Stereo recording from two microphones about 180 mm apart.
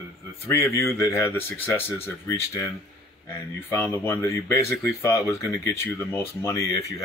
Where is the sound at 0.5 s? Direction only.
15° left (ahead or behind).